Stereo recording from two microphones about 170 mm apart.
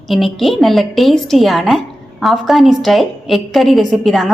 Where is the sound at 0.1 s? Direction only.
Centre (ahead or behind).